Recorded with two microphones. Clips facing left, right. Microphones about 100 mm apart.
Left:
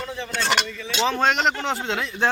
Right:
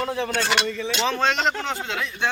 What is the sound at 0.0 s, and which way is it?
Speech, 60° right (ahead or behind).